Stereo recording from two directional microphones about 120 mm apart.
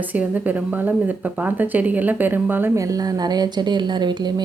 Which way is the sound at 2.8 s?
30° right (ahead or behind).